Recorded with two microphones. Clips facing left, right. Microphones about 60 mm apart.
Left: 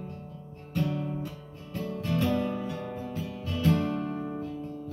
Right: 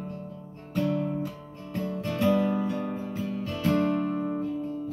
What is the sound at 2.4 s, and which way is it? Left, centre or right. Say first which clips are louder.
Music: right 5 dB; right.